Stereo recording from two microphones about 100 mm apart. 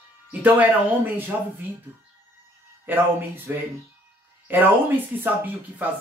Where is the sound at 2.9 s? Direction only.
20° right (ahead or behind).